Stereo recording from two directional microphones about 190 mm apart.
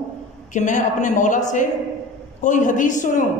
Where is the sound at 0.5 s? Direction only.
40° left (ahead or behind).